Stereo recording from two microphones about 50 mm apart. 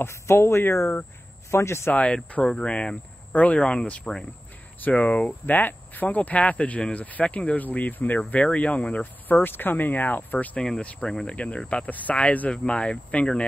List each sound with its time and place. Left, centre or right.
0.0 s speech: left
2.4 s speech: centre
5.5 s speech: left
9.0 s speech: left
10.5 s speech: centre